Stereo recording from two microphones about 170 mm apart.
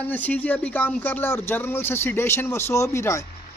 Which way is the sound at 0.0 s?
10° left (ahead or behind).